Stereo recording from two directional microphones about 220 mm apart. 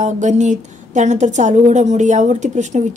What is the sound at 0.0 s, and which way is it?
A woman's voice, 35° right (ahead or behind).